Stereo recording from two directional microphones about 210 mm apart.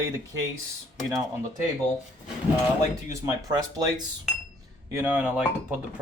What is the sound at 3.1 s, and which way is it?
Speech, 15° right (ahead or behind).